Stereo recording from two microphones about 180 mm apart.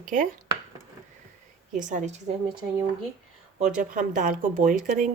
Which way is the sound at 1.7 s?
45° right (ahead or behind).